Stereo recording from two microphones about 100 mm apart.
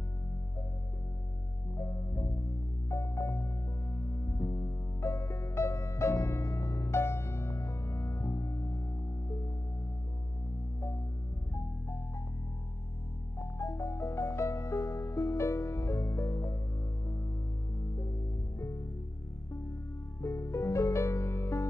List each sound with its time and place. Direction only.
2.9 s music: 30° left (ahead or behind)
13.6 s music: 30° left (ahead or behind)
20.2 s music: 25° left (ahead or behind)